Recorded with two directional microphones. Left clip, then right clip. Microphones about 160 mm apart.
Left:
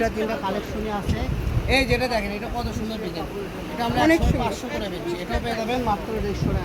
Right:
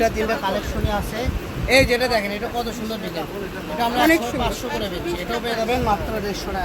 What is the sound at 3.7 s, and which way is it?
Speech, 20° right (ahead or behind).